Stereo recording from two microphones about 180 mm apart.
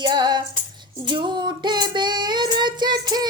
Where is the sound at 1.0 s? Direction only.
25° right (ahead or behind).